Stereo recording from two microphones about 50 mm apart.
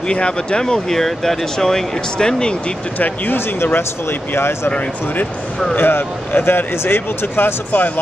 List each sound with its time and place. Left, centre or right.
0.1 s speech: centre
3.0 s speech: left
5.8 s speech: left